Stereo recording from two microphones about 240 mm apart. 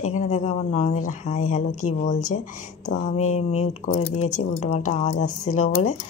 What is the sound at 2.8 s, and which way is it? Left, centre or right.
Speech, left.